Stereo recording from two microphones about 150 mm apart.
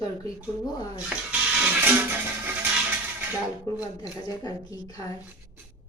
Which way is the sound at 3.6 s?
20° left (ahead or behind).